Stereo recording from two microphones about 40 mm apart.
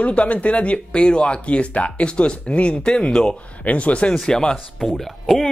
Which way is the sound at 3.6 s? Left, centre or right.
Left.